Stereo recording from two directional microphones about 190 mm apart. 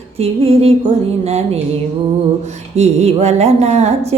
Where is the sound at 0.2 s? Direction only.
30° right (ahead or behind).